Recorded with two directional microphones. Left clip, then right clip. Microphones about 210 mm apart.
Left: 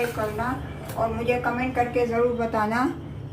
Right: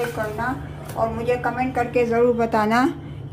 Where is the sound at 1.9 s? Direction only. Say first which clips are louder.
Right 8 dB; 45° right (ahead or behind).